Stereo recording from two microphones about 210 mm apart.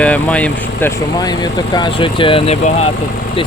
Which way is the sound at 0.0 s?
5° left (ahead or behind).